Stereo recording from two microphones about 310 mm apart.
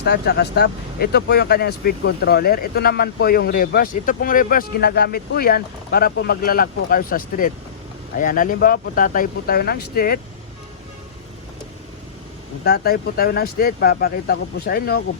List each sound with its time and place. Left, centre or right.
0.0 s speech: left
12.6 s speech: left